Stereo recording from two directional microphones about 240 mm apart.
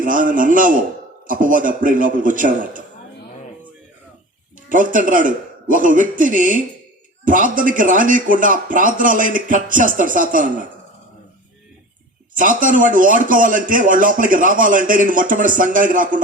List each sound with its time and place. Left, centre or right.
0.0 s a man's voice: right
4.7 s a man's voice: right
12.3 s a man's voice: right